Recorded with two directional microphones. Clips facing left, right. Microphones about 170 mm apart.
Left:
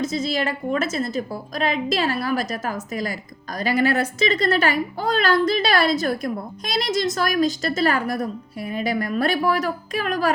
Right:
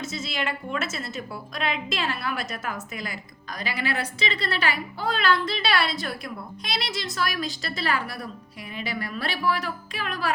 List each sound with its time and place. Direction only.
0.0 s a woman's voice: 40° left (ahead or behind)